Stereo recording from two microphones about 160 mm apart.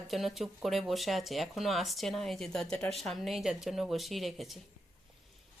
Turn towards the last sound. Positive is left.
turn(degrees=0)  # may be behind; listen again after turning